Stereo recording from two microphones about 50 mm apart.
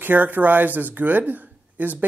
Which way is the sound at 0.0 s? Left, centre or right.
Right.